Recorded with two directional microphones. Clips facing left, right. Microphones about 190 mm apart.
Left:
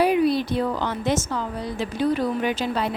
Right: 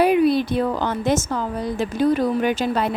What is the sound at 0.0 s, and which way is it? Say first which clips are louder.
A woman's voice: right 3 dB; 55° right (ahead or behind).